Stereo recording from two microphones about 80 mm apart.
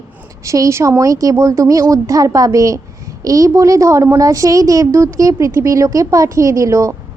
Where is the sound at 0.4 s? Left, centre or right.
Right.